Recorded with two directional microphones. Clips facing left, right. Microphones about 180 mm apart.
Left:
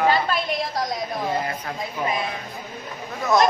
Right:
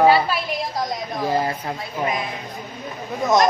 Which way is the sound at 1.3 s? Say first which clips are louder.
Right 7 dB; 30° right (ahead or behind).